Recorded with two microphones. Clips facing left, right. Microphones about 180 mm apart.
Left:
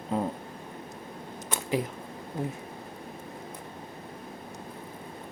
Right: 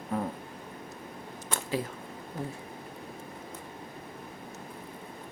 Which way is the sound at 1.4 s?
15° left (ahead or behind).